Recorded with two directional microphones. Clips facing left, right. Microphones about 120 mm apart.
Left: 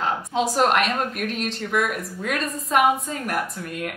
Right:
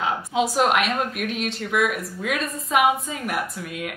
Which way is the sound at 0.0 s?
Centre (ahead or behind).